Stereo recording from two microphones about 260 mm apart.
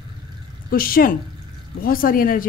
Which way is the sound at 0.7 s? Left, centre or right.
Left.